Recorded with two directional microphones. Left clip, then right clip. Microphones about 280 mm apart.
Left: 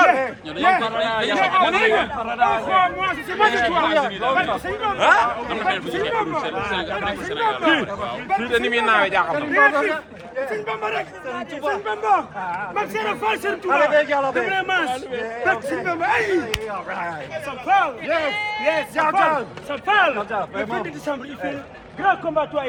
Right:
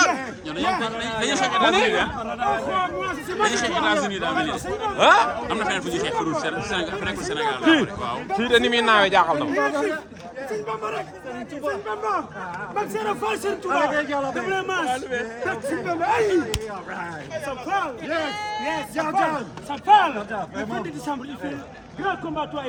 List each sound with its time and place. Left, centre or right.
0.1 s speech: centre
4.9 s a man's voice: right
5.5 s speech: centre
8.4 s a man's voice: right
9.5 s a man's voice: centre
14.5 s speech: centre
17.7 s speech: centre
18.9 s a man's voice: centre
19.9 s speech: centre